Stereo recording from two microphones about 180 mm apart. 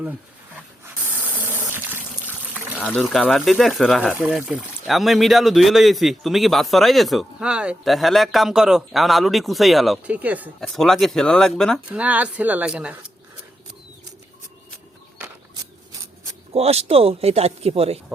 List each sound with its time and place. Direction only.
0.0 s dog: 10° right (ahead or behind)
1.7 s water: 10° right (ahead or behind)
3.0 s speech: centre (ahead or behind)
10.6 s speech: centre (ahead or behind)
11.9 s speech: 10° right (ahead or behind)
16.5 s speech: 35° right (ahead or behind)